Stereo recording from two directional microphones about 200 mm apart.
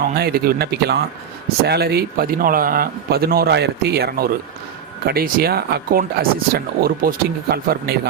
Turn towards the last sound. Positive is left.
turn(degrees=-50)  # may be behind; listen again after turning